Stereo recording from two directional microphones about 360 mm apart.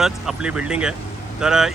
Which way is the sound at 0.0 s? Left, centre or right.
Centre.